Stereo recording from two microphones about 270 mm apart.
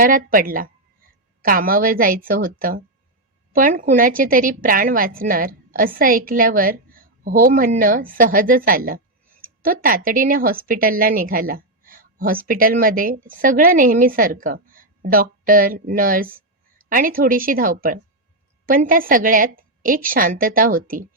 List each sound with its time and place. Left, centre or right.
0.0 s a woman's voice: right